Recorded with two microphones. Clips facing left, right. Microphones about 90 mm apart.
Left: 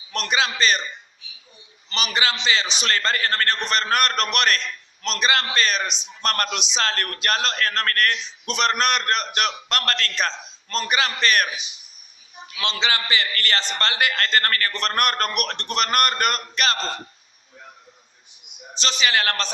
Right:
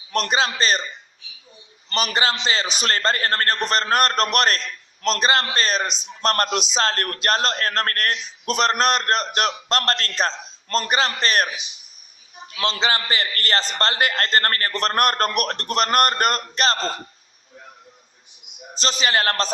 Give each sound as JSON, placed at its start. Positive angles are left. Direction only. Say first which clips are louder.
{"t": 0.1, "sound": "a man's voice", "louder": "right 2 dB", "side_deg": -40}
{"t": 1.9, "sound": "a man's voice", "louder": "right 2 dB", "side_deg": -45}
{"t": 12.5, "sound": "a man's voice", "louder": "right 2 dB", "side_deg": -40}
{"t": 18.7, "sound": "a man's voice", "louder": "right 1 dB", "side_deg": -40}